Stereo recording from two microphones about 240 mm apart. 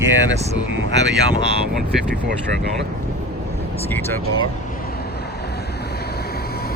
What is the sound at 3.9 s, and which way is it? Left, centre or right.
Speech, centre.